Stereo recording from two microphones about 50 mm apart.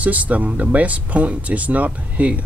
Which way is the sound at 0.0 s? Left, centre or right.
Right.